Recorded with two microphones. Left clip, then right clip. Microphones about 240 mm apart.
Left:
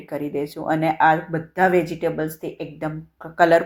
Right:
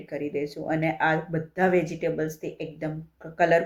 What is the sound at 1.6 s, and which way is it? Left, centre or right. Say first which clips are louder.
Speech: left 5 dB; centre.